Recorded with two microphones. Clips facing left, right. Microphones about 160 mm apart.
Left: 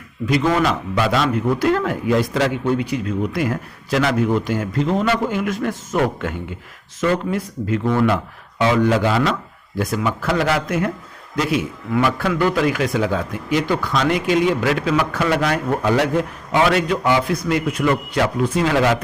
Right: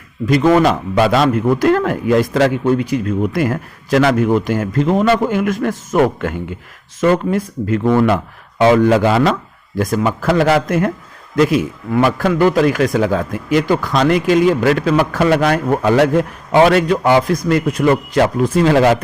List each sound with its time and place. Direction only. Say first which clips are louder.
0.3 s speech: right 6 dB; 50° right (ahead or behind)
0.9 s a man's voice: right 5 dB; 60° right (ahead or behind)
9.7 s speech: right 5 dB; 45° right (ahead or behind)
16.5 s speech: right 6 dB; 45° right (ahead or behind)